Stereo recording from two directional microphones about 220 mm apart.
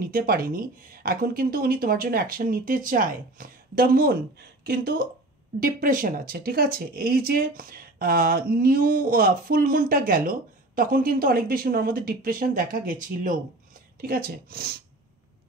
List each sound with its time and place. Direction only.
0.0 s speech: 40° right (ahead or behind)